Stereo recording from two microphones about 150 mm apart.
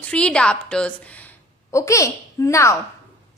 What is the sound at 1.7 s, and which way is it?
A woman's voice, 20° left (ahead or behind).